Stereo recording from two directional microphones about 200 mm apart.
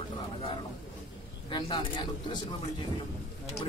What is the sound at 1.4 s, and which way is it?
A man's voice, 25° left (ahead or behind).